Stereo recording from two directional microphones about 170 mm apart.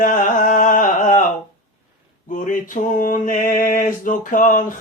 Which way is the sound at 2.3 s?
50° left (ahead or behind).